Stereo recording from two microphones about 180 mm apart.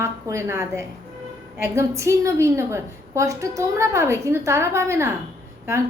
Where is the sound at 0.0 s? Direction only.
15° right (ahead or behind).